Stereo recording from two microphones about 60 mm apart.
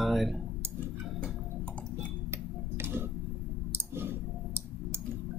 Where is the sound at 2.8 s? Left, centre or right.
Right.